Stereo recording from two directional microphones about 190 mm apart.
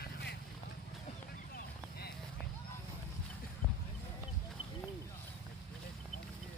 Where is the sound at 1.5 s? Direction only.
55° left (ahead or behind).